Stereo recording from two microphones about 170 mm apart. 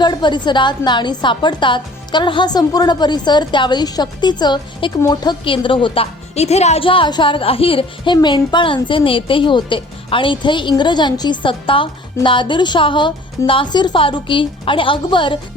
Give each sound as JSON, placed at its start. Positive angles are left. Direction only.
{"t": 0.0, "sound": "a woman's voice", "side_deg": 25}